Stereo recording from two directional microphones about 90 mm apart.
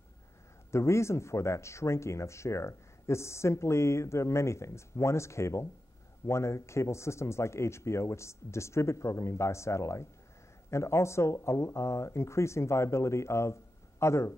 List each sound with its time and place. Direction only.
0.7 s speech: 30° left (ahead or behind)